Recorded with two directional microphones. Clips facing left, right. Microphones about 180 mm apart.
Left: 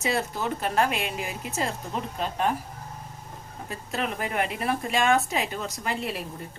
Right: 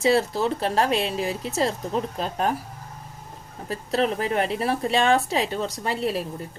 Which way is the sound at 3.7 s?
35° right (ahead or behind).